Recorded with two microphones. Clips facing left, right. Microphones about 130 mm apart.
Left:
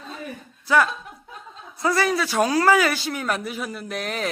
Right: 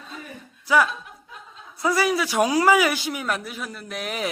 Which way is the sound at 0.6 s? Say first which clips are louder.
Even; 10° right (ahead or behind).